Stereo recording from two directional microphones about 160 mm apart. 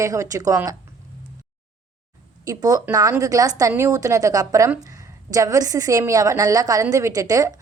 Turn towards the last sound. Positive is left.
turn(degrees=-20)  # may be behind; listen again after turning